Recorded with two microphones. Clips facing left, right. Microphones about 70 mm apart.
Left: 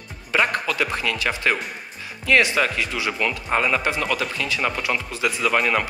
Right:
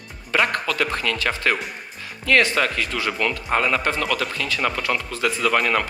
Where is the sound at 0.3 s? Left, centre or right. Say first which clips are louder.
Even; centre.